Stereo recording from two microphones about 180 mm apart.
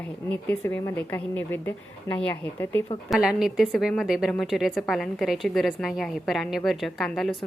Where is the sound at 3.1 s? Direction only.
5° right (ahead or behind).